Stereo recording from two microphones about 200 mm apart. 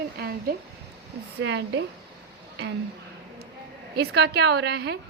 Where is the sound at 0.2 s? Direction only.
50° right (ahead or behind).